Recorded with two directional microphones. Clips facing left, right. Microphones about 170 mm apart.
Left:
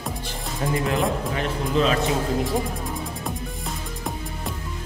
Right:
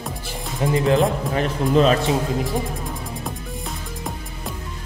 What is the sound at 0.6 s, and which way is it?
Speech, 20° right (ahead or behind).